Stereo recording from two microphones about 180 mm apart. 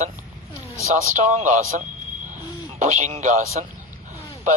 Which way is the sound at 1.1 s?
45° right (ahead or behind).